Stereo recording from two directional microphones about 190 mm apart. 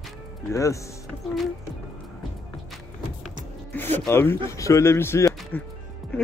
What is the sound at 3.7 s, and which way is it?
Speech, 10° left (ahead or behind).